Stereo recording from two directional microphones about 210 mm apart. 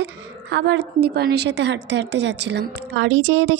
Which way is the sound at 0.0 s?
60° right (ahead or behind).